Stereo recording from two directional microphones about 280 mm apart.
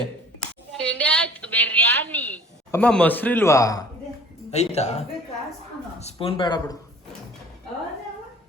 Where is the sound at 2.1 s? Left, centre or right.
Centre.